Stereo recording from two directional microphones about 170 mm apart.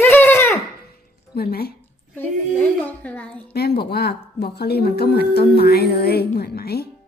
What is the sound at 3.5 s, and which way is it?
A woman's voice, 70° left (ahead or behind).